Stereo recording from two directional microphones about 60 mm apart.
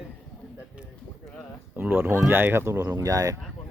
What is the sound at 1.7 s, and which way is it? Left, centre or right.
Speech, right.